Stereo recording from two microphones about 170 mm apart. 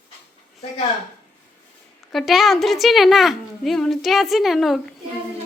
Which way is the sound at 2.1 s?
Centre (ahead or behind).